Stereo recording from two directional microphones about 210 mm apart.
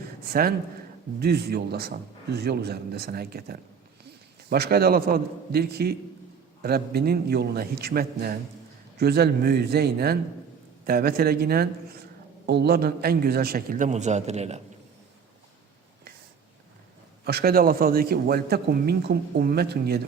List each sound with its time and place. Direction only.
0.3 s a man's voice: 45° right (ahead or behind)
17.2 s a man's voice: 50° right (ahead or behind)